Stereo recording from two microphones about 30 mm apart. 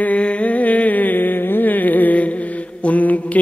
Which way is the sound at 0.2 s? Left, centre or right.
Left.